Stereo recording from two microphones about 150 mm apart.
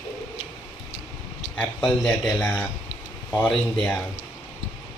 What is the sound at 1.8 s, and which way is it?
Speech, 10° left (ahead or behind).